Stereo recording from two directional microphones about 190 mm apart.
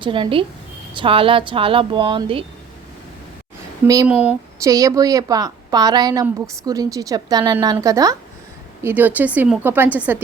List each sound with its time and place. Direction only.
0.0 s a woman's voice: 25° right (ahead or behind)
3.8 s a woman's voice: 20° right (ahead or behind)
4.1 s speech: 5° right (ahead or behind)
4.7 s a woman's voice: 15° right (ahead or behind)